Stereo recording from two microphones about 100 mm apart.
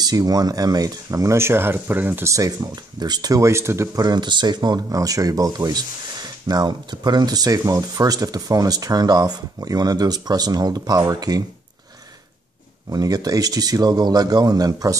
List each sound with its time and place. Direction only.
0.0 s speech: 40° right (ahead or behind); by 2.3 s 20° right (ahead or behind)
2.3 s speech: 35° right (ahead or behind)
4.0 s speech: 45° right (ahead or behind)
12.9 s speech: 40° right (ahead or behind)